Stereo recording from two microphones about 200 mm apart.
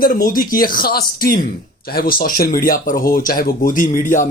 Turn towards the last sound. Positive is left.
turn(degrees=45)  # may be behind; listen again after turning